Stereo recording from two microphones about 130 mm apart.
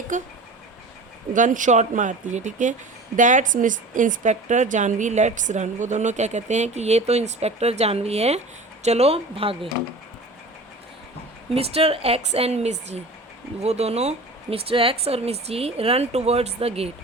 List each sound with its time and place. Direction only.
0.1 s speech: 80° right
1.3 s a woman's voice: 80° right; by 9.6 s 45° right (ahead or behind)
11.5 s speech: 50° right (ahead or behind)